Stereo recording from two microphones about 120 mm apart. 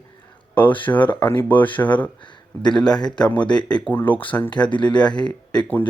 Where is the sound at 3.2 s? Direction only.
10° left (ahead or behind).